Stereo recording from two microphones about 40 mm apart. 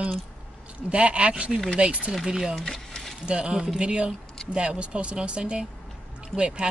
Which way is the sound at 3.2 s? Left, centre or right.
Right.